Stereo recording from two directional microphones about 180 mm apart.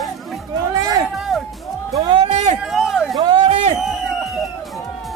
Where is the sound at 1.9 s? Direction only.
20° right (ahead or behind).